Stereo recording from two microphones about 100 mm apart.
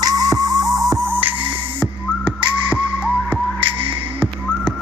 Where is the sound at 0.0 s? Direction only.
40° right (ahead or behind).